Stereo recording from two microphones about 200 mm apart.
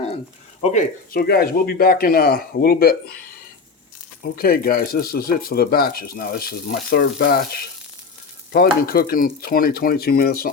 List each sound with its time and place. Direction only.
0.6 s speech: 40° left (ahead or behind)
4.2 s speech: 50° left (ahead or behind)
8.5 s speech: 50° left (ahead or behind)